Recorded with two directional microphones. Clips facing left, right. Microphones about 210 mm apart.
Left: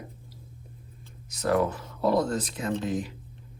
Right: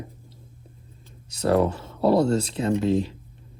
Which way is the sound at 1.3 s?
30° right (ahead or behind).